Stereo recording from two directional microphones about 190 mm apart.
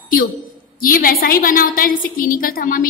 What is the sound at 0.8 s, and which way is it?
A woman's voice, 45° left (ahead or behind).